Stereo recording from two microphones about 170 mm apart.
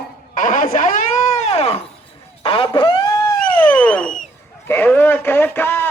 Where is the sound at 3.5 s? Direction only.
10° left (ahead or behind).